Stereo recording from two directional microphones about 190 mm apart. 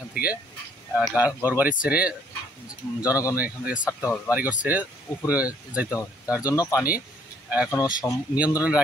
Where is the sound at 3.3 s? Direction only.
10° right (ahead or behind).